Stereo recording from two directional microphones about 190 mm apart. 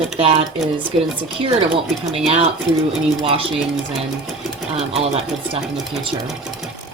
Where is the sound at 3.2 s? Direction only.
30° right (ahead or behind).